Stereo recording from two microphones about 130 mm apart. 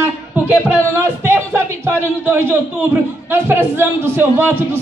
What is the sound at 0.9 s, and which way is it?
Speech, 20° right (ahead or behind).